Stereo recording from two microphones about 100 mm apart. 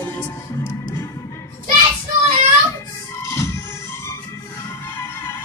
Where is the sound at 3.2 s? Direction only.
30° left (ahead or behind).